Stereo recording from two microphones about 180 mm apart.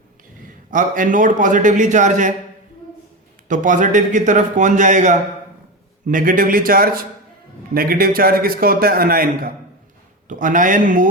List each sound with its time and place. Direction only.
0.7 s a man's voice: 45° right (ahead or behind)
3.5 s a man's voice: 45° right (ahead or behind)